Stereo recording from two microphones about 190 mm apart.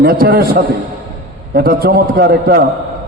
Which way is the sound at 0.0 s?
50° right (ahead or behind).